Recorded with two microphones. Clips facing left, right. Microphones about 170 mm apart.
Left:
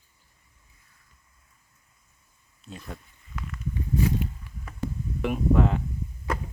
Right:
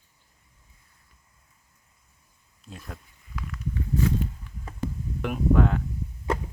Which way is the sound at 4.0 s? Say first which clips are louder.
Even; 15° left (ahead or behind).